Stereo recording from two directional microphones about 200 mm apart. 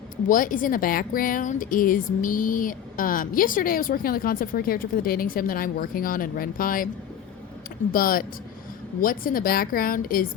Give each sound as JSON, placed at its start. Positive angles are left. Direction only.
{"t": 0.3, "sound": "a woman's voice", "side_deg": 40}
{"t": 7.9, "sound": "a woman's voice", "side_deg": 45}